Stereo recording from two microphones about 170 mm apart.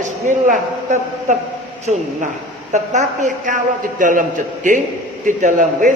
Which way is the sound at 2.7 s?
45° right (ahead or behind).